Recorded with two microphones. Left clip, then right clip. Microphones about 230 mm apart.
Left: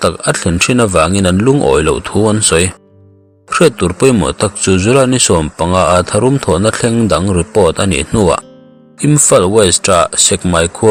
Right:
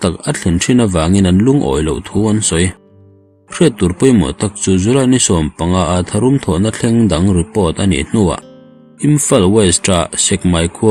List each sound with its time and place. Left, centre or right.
0.0 s speech: centre
10.1 s speech: left
10.5 s speech: left